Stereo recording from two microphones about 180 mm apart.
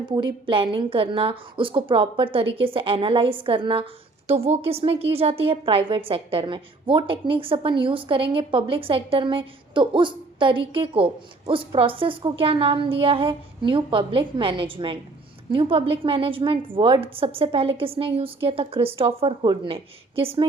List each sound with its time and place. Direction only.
0.0 s a woman's voice: 25° right (ahead or behind)